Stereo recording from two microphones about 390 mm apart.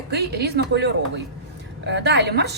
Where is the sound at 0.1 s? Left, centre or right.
Right.